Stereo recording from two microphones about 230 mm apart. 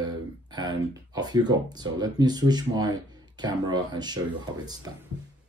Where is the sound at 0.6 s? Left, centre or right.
Centre.